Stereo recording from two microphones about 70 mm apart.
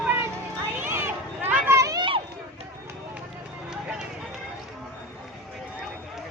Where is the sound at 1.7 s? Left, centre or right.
Right.